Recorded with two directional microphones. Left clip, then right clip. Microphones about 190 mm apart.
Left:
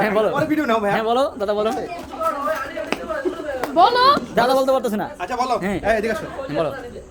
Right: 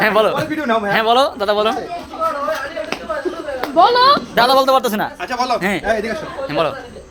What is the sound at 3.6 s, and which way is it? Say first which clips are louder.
Speech: right 3 dB; 30° right (ahead or behind).